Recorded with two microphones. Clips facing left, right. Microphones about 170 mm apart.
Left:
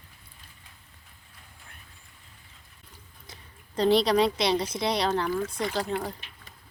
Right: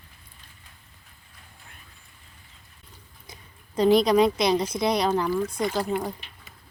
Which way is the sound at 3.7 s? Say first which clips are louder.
Right 3 dB; 10° right (ahead or behind).